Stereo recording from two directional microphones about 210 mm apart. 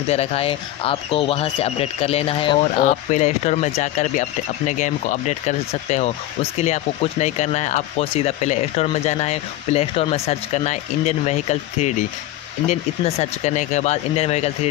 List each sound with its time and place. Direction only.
0.1 s speech: 30° left (ahead or behind)
2.8 s speech: 35° left (ahead or behind)